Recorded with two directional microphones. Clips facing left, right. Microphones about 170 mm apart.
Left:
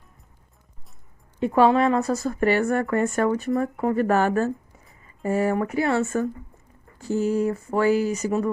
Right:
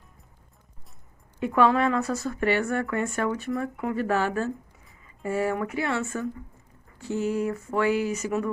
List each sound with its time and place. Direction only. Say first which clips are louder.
1.4 s a woman's voice: left 3 dB; 30° left (ahead or behind)